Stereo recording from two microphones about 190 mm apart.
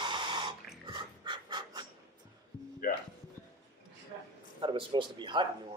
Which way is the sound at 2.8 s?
45° left (ahead or behind).